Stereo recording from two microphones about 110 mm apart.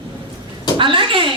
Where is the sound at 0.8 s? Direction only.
50° right (ahead or behind).